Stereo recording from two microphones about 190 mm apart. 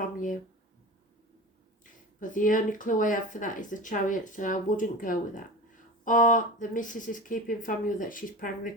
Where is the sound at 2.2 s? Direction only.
45° left (ahead or behind).